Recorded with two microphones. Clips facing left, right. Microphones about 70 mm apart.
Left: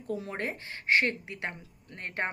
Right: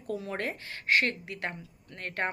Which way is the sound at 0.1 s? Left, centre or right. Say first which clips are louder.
Even; left.